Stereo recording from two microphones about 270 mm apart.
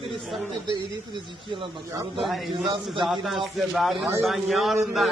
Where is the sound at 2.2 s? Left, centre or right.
Centre.